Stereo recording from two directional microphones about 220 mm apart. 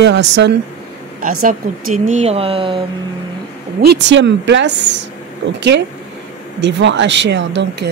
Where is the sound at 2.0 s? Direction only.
30° right (ahead or behind).